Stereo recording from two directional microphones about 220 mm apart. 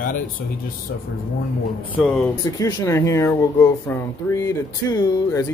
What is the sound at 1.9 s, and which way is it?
Speech, 10° left (ahead or behind).